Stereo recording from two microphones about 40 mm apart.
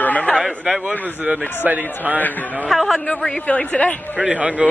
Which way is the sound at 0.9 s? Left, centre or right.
Right.